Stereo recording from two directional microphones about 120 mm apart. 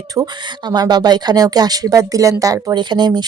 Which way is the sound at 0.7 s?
35° right (ahead or behind).